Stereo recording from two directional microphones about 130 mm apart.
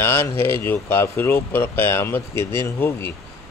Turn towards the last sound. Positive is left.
turn(degrees=20)  # may be behind; listen again after turning